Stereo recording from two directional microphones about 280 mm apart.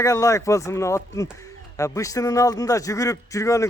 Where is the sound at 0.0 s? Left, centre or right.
Centre.